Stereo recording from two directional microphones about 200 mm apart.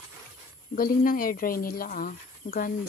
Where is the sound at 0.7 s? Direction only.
45° left (ahead or behind).